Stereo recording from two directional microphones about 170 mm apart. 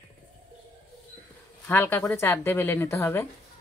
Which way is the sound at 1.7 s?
10° left (ahead or behind).